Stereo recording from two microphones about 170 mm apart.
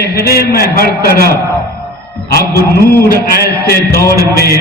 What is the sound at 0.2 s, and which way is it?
A man's voice, 65° left (ahead or behind).